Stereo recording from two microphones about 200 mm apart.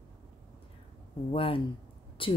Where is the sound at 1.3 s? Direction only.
25° left (ahead or behind).